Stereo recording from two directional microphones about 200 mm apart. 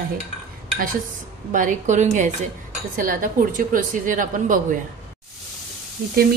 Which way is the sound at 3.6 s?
40° right (ahead or behind).